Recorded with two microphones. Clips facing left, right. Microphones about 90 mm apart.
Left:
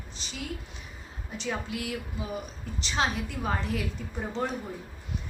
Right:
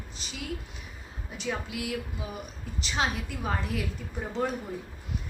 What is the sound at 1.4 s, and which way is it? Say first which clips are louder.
A woman's voice: even; 5° right (ahead or behind).